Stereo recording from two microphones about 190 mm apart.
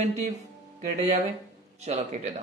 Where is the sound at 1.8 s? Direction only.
35° right (ahead or behind).